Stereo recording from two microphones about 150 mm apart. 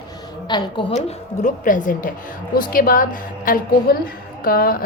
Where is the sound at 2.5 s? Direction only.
75° left (ahead or behind).